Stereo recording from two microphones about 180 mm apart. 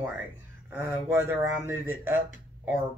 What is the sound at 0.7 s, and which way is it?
Speech, 10° right (ahead or behind).